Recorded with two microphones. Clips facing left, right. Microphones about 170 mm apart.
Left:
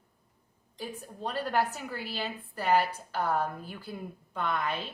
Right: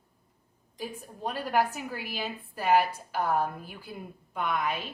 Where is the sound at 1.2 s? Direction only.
10° right (ahead or behind).